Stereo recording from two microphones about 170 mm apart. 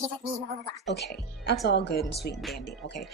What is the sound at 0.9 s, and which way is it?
A woman's voice, 75° left (ahead or behind).